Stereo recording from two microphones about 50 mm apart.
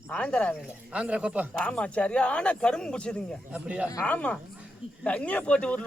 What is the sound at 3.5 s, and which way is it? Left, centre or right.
Speech, right.